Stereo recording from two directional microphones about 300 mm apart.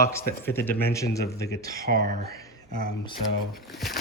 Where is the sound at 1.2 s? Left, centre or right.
Left.